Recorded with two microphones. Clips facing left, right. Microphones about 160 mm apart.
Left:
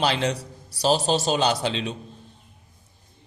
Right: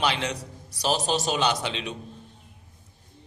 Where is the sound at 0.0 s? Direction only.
30° left (ahead or behind).